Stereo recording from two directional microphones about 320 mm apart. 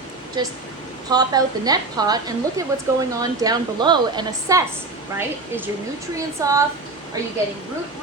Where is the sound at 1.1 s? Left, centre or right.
Centre.